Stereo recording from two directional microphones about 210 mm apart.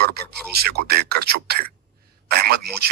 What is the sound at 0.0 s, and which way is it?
Speech, 50° right (ahead or behind).